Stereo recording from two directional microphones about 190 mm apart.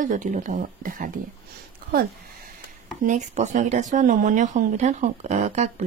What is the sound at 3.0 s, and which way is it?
Speech, 40° right (ahead or behind).